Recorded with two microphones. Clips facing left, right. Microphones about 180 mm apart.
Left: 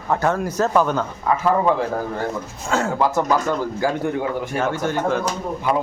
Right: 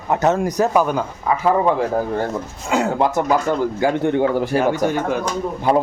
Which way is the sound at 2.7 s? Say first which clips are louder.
Right 2 dB; 15° right (ahead or behind).